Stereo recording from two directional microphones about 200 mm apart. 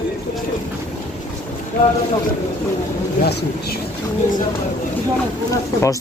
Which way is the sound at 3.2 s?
55° left (ahead or behind).